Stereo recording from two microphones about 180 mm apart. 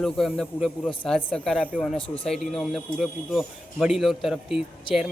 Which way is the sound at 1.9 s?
30° left (ahead or behind).